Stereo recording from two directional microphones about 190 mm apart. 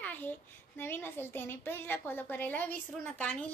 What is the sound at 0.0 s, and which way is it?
A child's voice, 10° left (ahead or behind).